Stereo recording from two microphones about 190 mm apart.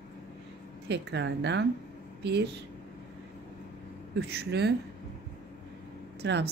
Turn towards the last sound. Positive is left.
turn(degrees=-60)  # may be behind; listen again after turning